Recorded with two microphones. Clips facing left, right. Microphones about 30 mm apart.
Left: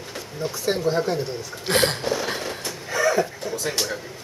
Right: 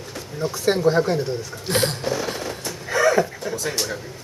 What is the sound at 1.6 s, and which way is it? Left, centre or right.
Music, left.